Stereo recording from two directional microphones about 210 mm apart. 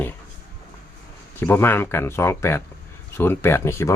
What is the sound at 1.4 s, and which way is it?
Speech, 10° left (ahead or behind).